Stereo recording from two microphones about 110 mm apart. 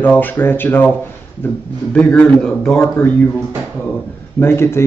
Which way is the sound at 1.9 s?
15° left (ahead or behind).